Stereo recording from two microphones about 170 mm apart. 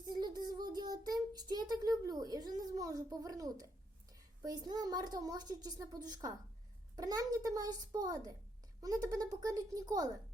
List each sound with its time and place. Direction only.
0.0 s child singing: 25° right (ahead or behind)
4.4 s a woman's voice: 25° right (ahead or behind)